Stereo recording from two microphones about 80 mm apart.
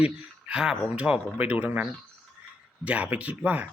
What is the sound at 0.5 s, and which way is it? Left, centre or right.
Speech, centre.